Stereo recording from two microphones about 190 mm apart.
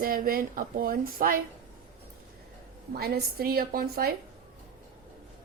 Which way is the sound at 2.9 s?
55° right (ahead or behind).